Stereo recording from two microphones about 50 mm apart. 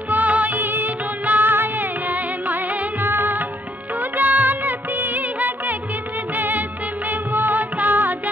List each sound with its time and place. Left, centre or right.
0.1 s music: right
3.0 s music of bollywood: right
7.1 s music: right